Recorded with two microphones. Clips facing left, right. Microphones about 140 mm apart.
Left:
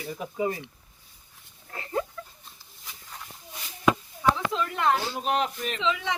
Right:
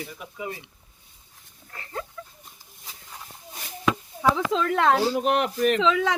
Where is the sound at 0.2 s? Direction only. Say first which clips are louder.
Left 6 dB; 30° left (ahead or behind).